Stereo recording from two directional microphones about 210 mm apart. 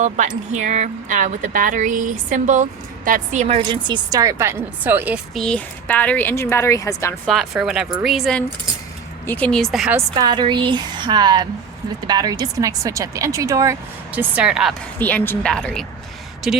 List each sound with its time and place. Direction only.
0.0 s speech: 35° right (ahead or behind); by 7.2 s 15° left (ahead or behind)
7.3 s speech: centre (ahead or behind)
10.2 s speech: 20° right (ahead or behind); by 14.8 s 5° right (ahead or behind)
14.9 s speech: 10° left (ahead or behind)